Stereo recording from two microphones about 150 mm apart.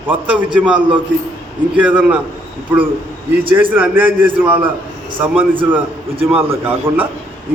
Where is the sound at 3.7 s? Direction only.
10° right (ahead or behind).